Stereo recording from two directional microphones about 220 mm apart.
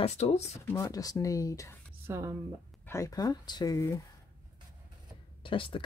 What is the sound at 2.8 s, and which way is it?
Speech, 15° left (ahead or behind).